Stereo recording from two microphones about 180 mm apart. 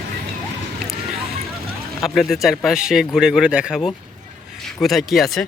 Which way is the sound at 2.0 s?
Centre (ahead or behind).